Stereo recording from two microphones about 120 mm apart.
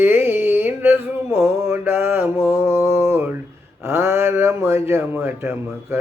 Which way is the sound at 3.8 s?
25° right (ahead or behind).